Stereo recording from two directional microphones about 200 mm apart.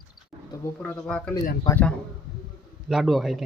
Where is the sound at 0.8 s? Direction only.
5° left (ahead or behind).